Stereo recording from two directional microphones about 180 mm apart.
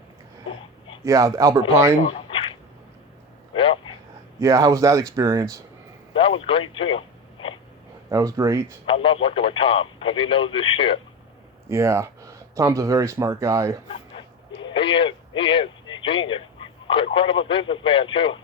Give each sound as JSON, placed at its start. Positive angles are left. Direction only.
{"t": 1.0, "sound": "a man's voice", "side_deg": -20}
{"t": 2.0, "sound": "a sound", "side_deg": 30}
{"t": 3.5, "sound": "a sound", "side_deg": 30}
{"t": 4.4, "sound": "speech", "side_deg": -15}
{"t": 6.4, "sound": "speech", "side_deg": 30}
{"t": 8.1, "sound": "speech", "side_deg": -20}
{"t": 8.9, "sound": "speech", "side_deg": 30}
{"t": 11.7, "sound": "speech", "side_deg": -15}
{"t": 13.8, "sound": "a sound", "side_deg": 30}
{"t": 15.4, "sound": "speech", "side_deg": 30}